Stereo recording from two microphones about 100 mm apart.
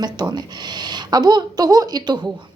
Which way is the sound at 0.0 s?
45° right (ahead or behind).